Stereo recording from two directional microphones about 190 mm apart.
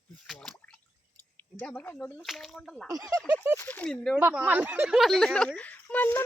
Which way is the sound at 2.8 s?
20° right (ahead or behind).